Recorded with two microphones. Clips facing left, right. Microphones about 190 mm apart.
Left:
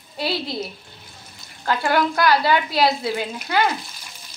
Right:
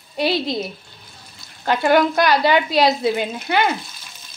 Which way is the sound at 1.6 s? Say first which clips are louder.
Right 4 dB; 20° right (ahead or behind).